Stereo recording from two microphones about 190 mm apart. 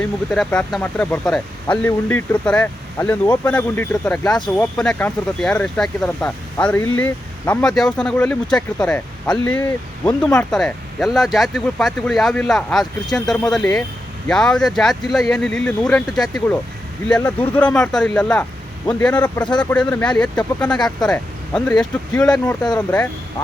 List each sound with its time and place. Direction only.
0.0 s speech: 5° left (ahead or behind)